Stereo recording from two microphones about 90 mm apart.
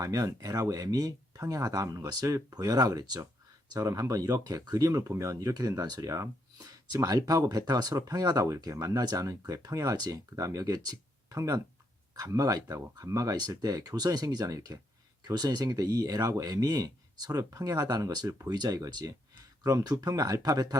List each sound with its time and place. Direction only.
0.0 s speech: 40° right (ahead or behind)